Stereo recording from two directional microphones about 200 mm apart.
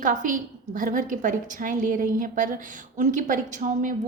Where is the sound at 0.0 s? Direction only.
40° right (ahead or behind).